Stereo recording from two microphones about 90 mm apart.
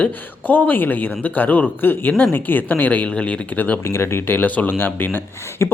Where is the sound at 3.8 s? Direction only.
30° left (ahead or behind).